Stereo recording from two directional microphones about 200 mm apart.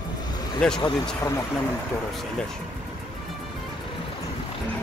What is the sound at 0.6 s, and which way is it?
Speech, 5° left (ahead or behind).